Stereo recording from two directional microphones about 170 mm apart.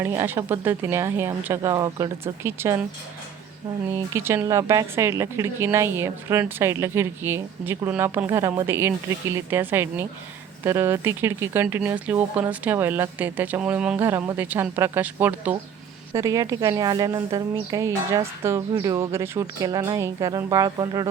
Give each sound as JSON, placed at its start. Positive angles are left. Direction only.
{"t": 0.0, "sound": "speech", "side_deg": -15}
{"t": 3.9, "sound": "a woman's voice", "side_deg": -15}